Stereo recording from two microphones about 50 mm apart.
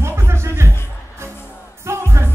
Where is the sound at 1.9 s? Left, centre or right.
Right.